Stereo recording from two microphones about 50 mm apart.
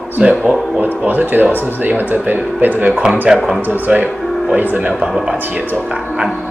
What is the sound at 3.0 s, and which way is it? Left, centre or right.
Speech, centre.